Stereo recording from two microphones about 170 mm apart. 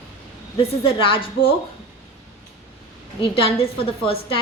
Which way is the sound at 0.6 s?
30° left (ahead or behind).